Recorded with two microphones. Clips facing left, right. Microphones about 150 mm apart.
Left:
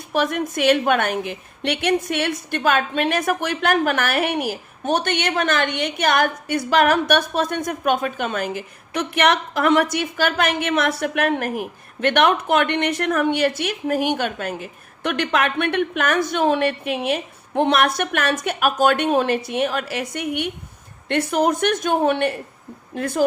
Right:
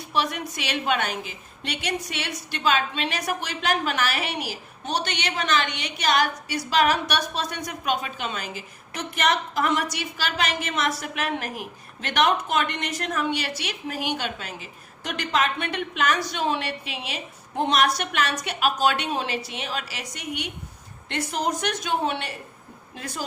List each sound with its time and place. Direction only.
0.1 s a woman's voice: 50° left (ahead or behind)